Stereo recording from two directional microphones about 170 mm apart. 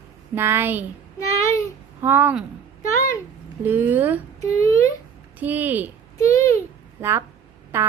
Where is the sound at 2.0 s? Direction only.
10° right (ahead or behind).